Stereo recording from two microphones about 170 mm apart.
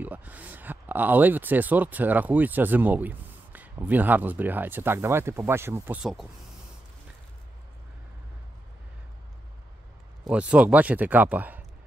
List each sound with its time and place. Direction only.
0.0 s speech: 10° right (ahead or behind)
10.2 s speech: 5° right (ahead or behind)